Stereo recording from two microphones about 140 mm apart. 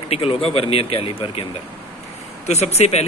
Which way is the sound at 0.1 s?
40° left (ahead or behind).